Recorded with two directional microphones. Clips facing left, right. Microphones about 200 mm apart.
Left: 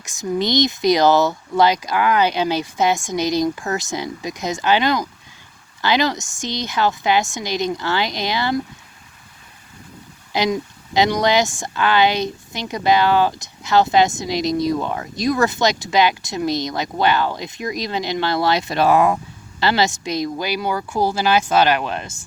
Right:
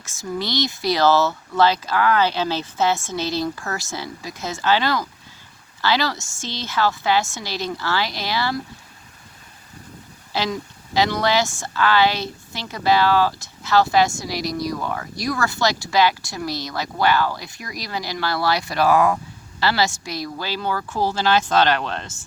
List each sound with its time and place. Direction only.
0.0 s speech: 15° left (ahead or behind)
10.3 s speech: 20° left (ahead or behind)